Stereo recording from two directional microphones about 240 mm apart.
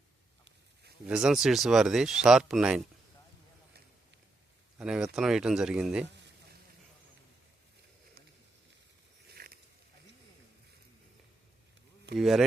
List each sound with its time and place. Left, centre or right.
1.0 s speech: centre
4.8 s speech: centre
9.3 s a sound: right
12.1 s speech: centre